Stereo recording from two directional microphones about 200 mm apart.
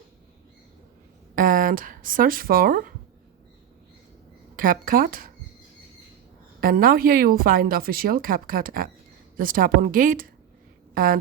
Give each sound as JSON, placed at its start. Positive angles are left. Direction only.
{"t": 1.4, "sound": "a woman's voice", "side_deg": -45}
{"t": 4.5, "sound": "a woman's voice", "side_deg": -45}
{"t": 6.6, "sound": "a woman's voice", "side_deg": -45}